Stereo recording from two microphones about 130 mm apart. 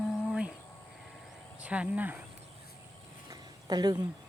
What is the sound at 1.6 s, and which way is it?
Speech, 10° right (ahead or behind).